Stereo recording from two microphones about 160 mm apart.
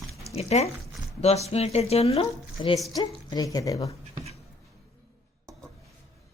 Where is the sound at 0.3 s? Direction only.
40° left (ahead or behind); by 3.9 s 20° left (ahead or behind).